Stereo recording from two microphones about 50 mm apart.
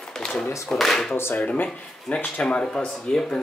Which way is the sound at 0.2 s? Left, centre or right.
Centre.